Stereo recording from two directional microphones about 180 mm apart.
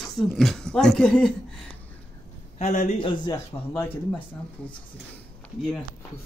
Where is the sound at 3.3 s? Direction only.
15° left (ahead or behind).